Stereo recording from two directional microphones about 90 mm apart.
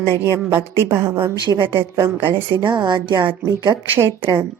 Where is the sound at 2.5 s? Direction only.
60° right (ahead or behind).